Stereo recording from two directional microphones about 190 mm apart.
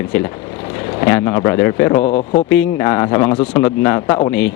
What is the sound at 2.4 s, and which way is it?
Speech, 10° left (ahead or behind).